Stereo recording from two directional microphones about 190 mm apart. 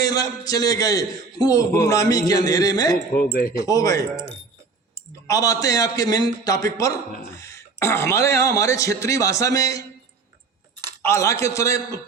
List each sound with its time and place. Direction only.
0.0 s a man's voice: 20° left (ahead or behind)
5.3 s speech: 15° left (ahead or behind)
11.0 s speech: 15° left (ahead or behind)